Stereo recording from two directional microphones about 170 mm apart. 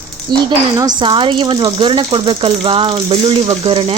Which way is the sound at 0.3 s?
25° right (ahead or behind).